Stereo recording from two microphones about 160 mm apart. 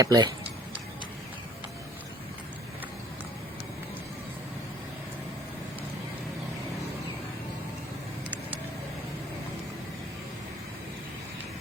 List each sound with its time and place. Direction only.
0.0 s speech: 25° right (ahead or behind)